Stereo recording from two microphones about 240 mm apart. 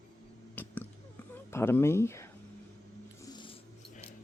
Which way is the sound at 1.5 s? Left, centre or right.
Centre.